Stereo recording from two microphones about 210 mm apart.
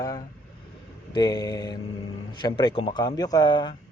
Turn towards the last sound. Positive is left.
turn(degrees=20)  # may be behind; listen again after turning